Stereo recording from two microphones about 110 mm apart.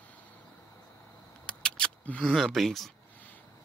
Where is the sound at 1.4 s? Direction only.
5° left (ahead or behind).